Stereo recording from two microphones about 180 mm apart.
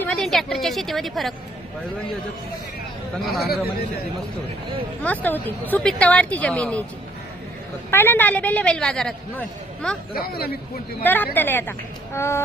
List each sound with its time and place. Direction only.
0.0 s a woman's voice: 5° left (ahead or behind)
3.4 s a man's voice: 60° left (ahead or behind)
5.0 s speech: 10° left (ahead or behind)
7.9 s speech: 10° left (ahead or behind)
10.2 s a man's voice: 60° left (ahead or behind)
11.0 s speech: 10° left (ahead or behind)